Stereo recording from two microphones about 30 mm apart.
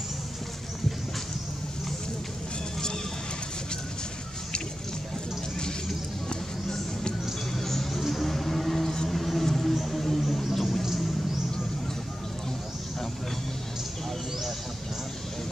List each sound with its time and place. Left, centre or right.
6.2 s music: left
7.5 s music: centre
8.0 s vehicle: centre
9.0 s a sound: centre
9.8 s music: centre